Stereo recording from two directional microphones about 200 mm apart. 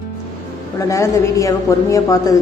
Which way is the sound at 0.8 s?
15° left (ahead or behind).